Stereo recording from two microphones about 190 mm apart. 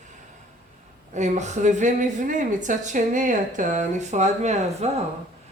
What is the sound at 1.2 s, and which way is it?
A woman's voice, 35° right (ahead or behind).